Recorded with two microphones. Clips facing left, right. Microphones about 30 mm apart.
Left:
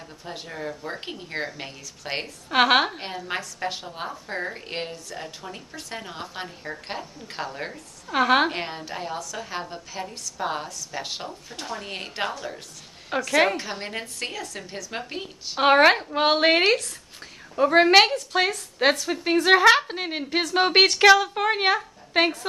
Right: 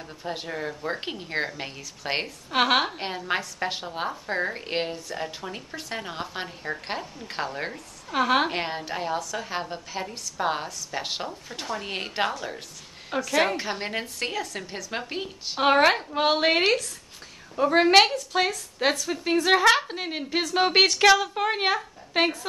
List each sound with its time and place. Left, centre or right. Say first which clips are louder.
0.2 s a woman's voice: right 3 dB; centre
2.5 s a woman's voice: left 3 dB; centre
3.3 s a woman's voice: right 2 dB; centre
8.1 s a woman's voice: left 3 dB; centre
8.5 s a woman's voice: right 1 dB; centre
13.2 s a woman's voice: left 3 dB; centre
13.6 s a woman's voice: right 2 dB; centre
15.6 s a woman's voice: left 3 dB; centre